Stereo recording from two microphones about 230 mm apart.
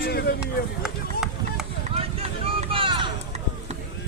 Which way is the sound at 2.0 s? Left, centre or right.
Right.